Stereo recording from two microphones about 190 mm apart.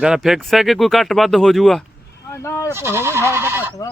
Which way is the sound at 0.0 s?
5° right (ahead or behind).